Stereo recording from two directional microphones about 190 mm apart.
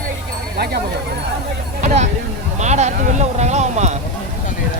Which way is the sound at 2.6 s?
35° right (ahead or behind).